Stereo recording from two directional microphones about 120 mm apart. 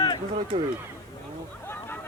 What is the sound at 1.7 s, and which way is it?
Music, 15° left (ahead or behind).